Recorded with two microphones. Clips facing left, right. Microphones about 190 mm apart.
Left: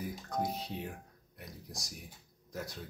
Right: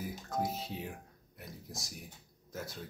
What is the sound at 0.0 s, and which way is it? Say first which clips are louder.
Speech: even; centre (ahead or behind).